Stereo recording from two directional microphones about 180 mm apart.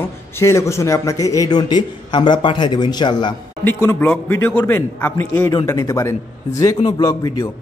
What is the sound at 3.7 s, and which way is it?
A man's voice, 10° left (ahead or behind).